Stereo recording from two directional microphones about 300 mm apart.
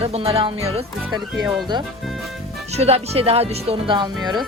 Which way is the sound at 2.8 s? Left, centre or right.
Centre.